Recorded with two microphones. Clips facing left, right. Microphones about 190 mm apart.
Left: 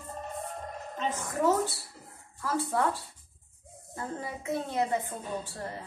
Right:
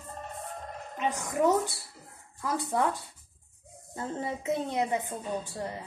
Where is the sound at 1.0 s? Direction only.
15° right (ahead or behind).